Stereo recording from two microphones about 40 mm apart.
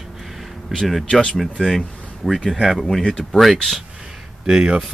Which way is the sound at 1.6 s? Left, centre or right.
Centre.